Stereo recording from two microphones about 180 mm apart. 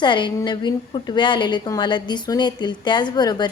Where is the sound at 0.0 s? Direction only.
25° left (ahead or behind).